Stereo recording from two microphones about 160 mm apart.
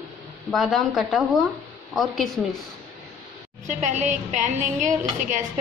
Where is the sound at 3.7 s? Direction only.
50° right (ahead or behind).